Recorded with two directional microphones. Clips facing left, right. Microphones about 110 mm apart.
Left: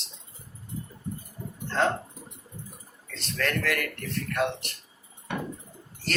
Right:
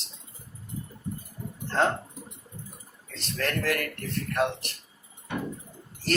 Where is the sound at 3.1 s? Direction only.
35° right (ahead or behind).